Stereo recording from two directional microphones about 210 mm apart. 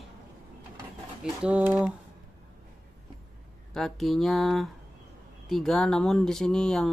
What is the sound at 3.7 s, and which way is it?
Speech, centre (ahead or behind).